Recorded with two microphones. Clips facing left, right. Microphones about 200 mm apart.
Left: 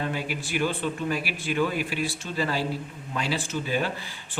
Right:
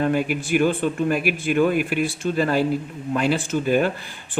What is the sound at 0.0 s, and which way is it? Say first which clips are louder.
Speech: right 9 dB; 50° right (ahead or behind).